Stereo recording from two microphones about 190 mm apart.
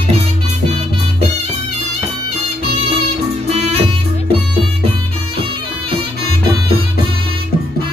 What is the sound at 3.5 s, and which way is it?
Music, 30° right (ahead or behind).